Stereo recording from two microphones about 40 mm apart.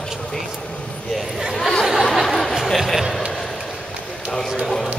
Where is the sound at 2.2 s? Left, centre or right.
Centre.